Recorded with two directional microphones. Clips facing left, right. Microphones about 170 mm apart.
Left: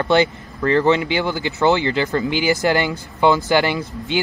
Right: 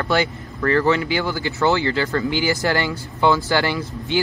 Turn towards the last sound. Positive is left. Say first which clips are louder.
# left 1 dB
turn(degrees=20)  # may be behind; listen again after turning